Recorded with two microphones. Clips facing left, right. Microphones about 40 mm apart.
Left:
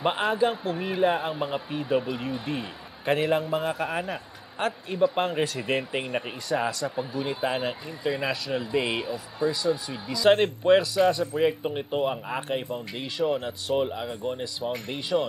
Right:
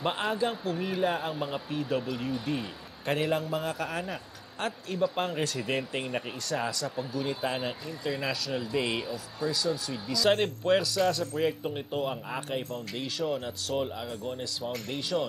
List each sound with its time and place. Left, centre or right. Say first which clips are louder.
0.0 s speech: left 5 dB; centre